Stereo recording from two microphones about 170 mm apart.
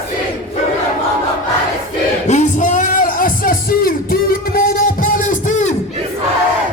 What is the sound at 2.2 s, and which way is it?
Music, 45° left (ahead or behind).